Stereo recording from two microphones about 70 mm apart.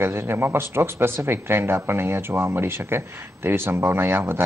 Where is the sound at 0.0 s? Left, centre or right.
Right.